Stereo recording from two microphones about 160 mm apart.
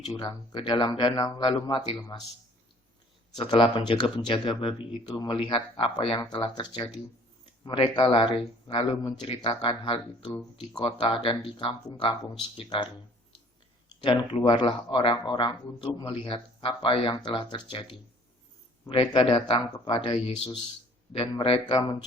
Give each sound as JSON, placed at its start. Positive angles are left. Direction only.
{"t": 0.0, "sound": "speech", "side_deg": 30}
{"t": 3.3, "sound": "speech", "side_deg": 30}
{"t": 14.0, "sound": "speech", "side_deg": 30}